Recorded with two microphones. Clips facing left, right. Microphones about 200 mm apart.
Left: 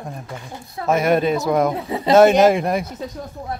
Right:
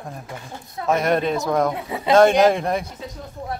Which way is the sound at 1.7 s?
30° left (ahead or behind).